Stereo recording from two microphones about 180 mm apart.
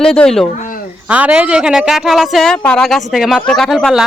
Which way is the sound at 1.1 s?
5° right (ahead or behind).